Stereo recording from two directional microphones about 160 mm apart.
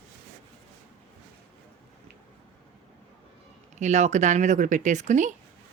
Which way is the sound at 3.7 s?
45° right (ahead or behind).